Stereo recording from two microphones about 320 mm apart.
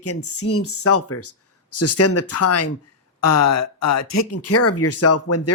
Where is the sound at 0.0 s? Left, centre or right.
Left.